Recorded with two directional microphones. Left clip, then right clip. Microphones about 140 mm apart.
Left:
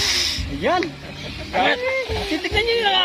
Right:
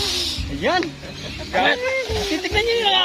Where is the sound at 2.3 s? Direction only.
5° left (ahead or behind).